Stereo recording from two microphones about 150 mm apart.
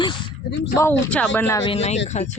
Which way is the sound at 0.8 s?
10° left (ahead or behind).